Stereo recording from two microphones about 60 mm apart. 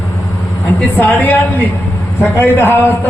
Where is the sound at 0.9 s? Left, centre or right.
Left.